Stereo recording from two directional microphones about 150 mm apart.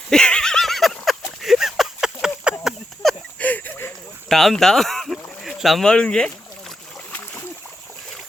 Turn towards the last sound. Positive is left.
turn(degrees=10)  # may be behind; listen again after turning